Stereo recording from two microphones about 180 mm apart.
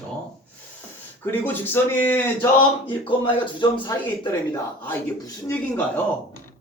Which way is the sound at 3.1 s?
25° left (ahead or behind).